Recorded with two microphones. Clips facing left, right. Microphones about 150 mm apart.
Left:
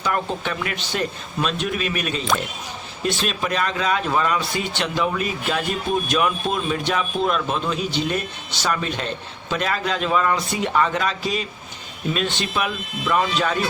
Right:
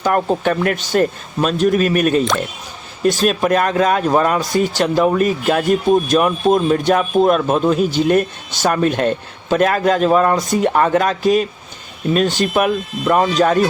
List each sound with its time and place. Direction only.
0.0 s speech: 45° right (ahead or behind)